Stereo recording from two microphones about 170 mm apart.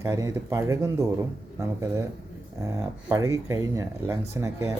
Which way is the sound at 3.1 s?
20° right (ahead or behind).